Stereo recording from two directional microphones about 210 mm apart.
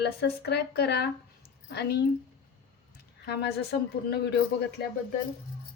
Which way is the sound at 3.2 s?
50° left (ahead or behind).